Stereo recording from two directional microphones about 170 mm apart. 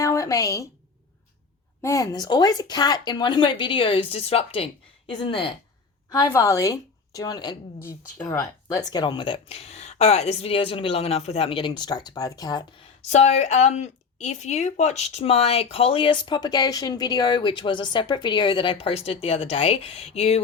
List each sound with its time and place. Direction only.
0.0 s a sound: 20° left (ahead or behind)
1.8 s speech: 20° left (ahead or behind)
6.1 s a woman's voice: 20° left (ahead or behind)
13.1 s speech: 40° left (ahead or behind)